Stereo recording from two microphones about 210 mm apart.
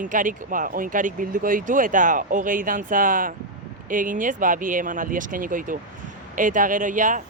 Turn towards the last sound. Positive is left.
turn(degrees=-40)  # may be behind; listen again after turning